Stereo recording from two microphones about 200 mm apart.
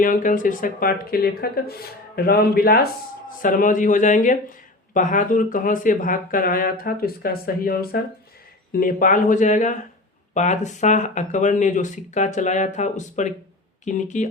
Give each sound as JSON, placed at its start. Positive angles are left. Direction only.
{"t": 0.0, "sound": "speech", "side_deg": 40}